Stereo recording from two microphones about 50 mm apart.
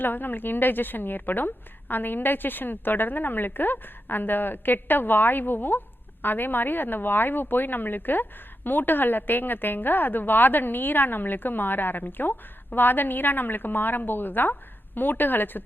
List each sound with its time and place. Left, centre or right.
0.0 s speech: left